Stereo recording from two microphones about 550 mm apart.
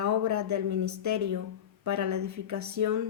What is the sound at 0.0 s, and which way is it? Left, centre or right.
Speech, right.